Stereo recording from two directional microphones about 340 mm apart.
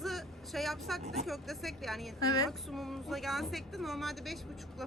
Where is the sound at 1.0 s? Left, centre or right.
Centre.